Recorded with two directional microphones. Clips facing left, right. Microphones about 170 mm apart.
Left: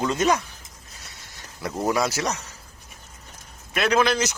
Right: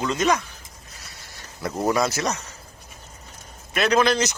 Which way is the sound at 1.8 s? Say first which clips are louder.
Right 1 dB; 10° left (ahead or behind).